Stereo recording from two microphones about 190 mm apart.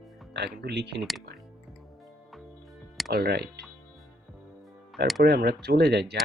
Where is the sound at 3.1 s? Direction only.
55° right (ahead or behind).